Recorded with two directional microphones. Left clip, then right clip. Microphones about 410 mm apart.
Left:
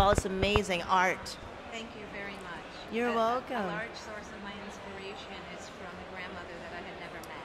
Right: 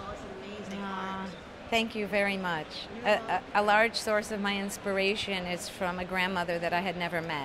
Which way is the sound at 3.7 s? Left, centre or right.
Right.